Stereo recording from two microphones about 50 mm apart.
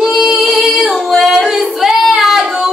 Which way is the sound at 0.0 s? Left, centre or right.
Centre.